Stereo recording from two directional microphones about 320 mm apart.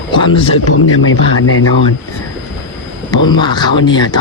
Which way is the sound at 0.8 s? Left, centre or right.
Left.